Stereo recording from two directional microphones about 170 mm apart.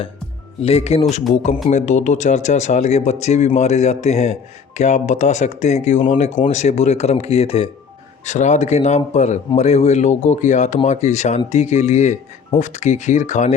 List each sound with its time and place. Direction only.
0.6 s speech: 35° left (ahead or behind)